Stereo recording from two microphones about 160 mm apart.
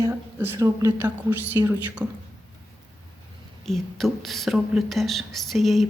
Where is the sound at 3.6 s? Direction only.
Centre (ahead or behind).